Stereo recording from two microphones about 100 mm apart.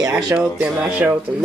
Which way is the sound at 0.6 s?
15° right (ahead or behind).